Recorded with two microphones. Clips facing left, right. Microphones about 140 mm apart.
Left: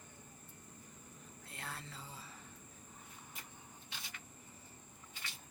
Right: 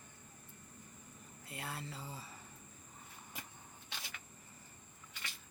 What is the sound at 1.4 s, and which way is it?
Speech, 5° right (ahead or behind).